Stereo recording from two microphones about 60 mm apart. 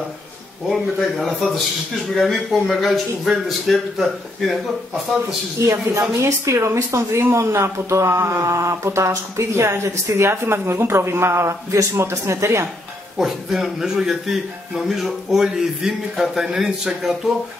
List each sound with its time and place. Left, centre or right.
0.7 s speech: centre
5.7 s speech: right
13.2 s speech: centre